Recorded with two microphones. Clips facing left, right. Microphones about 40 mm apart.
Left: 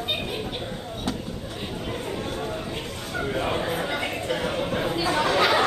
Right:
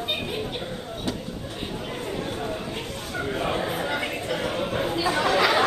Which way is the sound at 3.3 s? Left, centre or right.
Centre.